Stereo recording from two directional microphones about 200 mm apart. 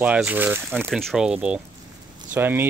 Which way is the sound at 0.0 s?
5° right (ahead or behind).